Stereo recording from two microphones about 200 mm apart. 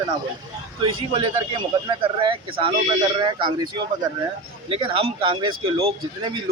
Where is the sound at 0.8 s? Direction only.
25° right (ahead or behind).